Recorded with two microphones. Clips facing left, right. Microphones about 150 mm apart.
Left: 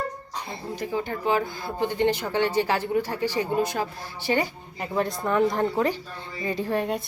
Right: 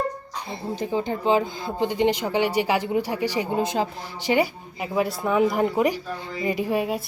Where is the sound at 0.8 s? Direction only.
25° right (ahead or behind).